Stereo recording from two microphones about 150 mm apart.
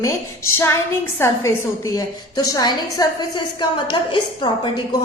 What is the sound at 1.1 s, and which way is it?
A woman's voice, 20° left (ahead or behind).